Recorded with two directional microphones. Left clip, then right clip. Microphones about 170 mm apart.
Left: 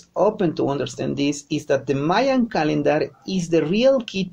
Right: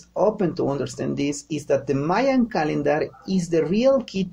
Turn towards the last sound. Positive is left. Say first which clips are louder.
# left 2 dB
turn(degrees=20)  # may be behind; listen again after turning